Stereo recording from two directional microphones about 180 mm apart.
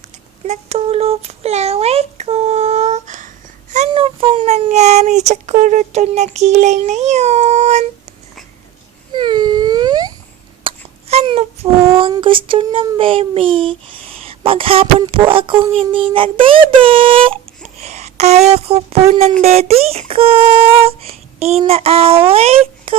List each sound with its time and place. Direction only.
0.4 s speech: 40° right (ahead or behind)
9.1 s wail: 25° right (ahead or behind)
10.6 s speech: 30° right (ahead or behind)
14.3 s a sound: 30° right (ahead or behind)
15.0 s speech: 30° right (ahead or behind)
19.4 s child singing: 35° right (ahead or behind)
22.3 s speech: 35° right (ahead or behind)